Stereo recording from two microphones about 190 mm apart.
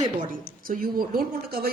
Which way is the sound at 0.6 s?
45° right (ahead or behind).